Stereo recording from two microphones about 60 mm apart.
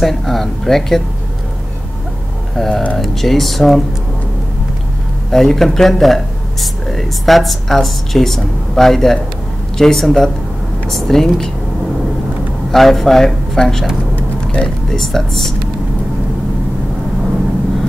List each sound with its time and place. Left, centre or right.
0.0 s speech: centre
2.5 s speech: centre
5.3 s speech: centre
12.7 s speech: centre
14.1 s vehicle: centre
14.9 s speech: centre